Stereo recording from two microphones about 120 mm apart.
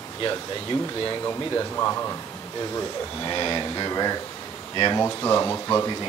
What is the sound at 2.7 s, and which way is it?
Speech, 35° left (ahead or behind).